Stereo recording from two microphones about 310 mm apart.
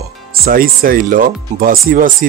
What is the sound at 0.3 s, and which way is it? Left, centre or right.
Speech, right.